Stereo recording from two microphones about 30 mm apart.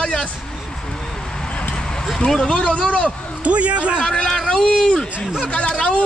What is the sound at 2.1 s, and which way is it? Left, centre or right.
Speech, left.